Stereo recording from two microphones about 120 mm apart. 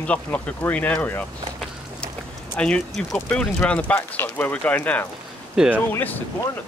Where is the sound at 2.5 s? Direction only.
10° left (ahead or behind).